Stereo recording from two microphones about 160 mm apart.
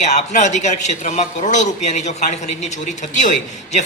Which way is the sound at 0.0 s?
45° left (ahead or behind).